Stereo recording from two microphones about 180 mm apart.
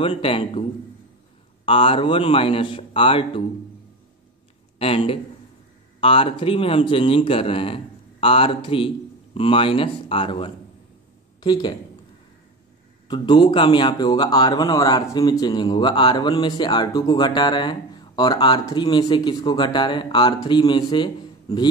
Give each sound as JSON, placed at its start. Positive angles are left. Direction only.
{"t": 0.0, "sound": "speech", "side_deg": 30}
{"t": 1.7, "sound": "speech", "side_deg": 30}
{"t": 4.7, "sound": "speech", "side_deg": 30}
{"t": 13.1, "sound": "speech", "side_deg": 25}